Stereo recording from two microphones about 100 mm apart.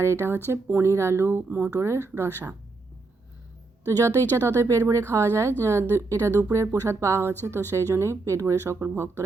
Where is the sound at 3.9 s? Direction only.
35° right (ahead or behind).